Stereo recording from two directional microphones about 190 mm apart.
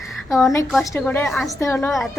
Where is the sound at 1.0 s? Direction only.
10° left (ahead or behind).